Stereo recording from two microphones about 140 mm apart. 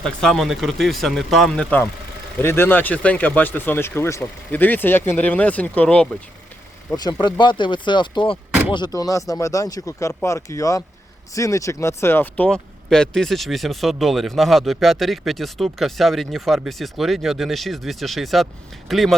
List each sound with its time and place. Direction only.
0.0 s speech: centre (ahead or behind)
2.4 s speech: 15° left (ahead or behind)
6.9 s speech: 30° left (ahead or behind); by 19.1 s centre (ahead or behind)